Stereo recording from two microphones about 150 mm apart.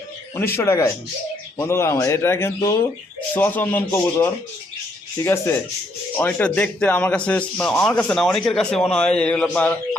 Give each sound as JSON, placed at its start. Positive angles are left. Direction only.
{"t": 0.3, "sound": "speech", "side_deg": 15}